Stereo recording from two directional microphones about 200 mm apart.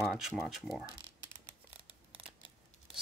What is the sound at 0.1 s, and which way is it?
Speech, centre (ahead or behind).